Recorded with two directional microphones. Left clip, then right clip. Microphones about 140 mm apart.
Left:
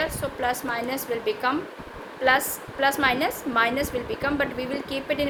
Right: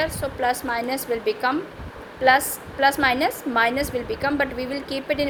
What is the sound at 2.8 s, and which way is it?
A woman's voice, 30° right (ahead or behind).